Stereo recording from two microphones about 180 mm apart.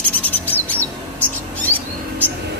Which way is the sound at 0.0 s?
10° left (ahead or behind).